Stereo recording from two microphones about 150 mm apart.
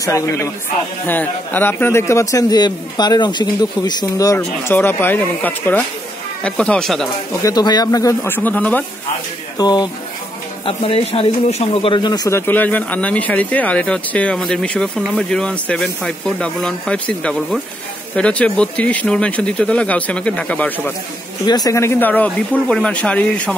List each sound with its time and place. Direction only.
0.0 s a man's voice: 20° left (ahead or behind)
4.4 s speech: 15° left (ahead or behind)
7.4 s a man's voice: 25° left (ahead or behind); by 8.8 s 10° left (ahead or behind)
9.6 s a man's voice: 25° left (ahead or behind)
10.6 s speech: 40° left (ahead or behind); by 20.9 s 10° left (ahead or behind)
21.5 s speech: 25° left (ahead or behind); by 23.5 s 10° left (ahead or behind)